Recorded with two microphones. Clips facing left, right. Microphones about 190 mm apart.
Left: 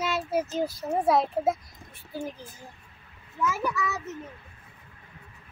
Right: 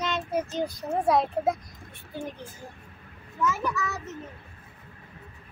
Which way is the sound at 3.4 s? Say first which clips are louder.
Even; 5° left (ahead or behind).